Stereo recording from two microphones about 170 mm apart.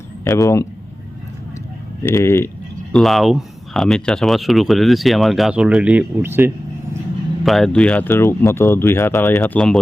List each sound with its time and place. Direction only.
0.3 s speech: 20° left (ahead or behind)
2.0 s speech: 15° left (ahead or behind)
2.9 s speech: centre (ahead or behind)
7.4 s speech: centre (ahead or behind)